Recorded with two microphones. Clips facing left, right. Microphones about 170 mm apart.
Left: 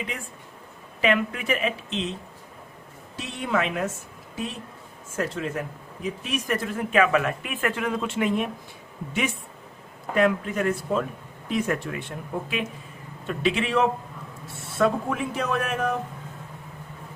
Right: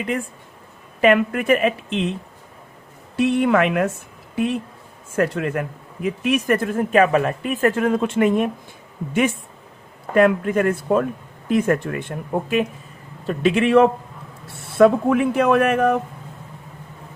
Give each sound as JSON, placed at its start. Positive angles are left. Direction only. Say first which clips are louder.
{"t": 1.0, "sound": "a man's voice", "louder": "right 8 dB", "side_deg": -50}
{"t": 3.2, "sound": "speech", "louder": "right 10 dB", "side_deg": -60}
{"t": 5.1, "sound": "a man's voice", "louder": "right 7 dB", "side_deg": -60}